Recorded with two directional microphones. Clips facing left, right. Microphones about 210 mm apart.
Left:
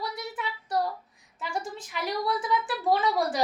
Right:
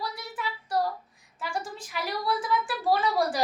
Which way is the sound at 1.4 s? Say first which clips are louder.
Even; 20° left (ahead or behind).